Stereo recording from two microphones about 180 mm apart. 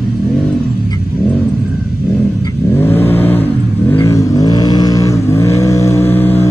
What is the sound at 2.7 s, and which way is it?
Vehicle, 10° left (ahead or behind).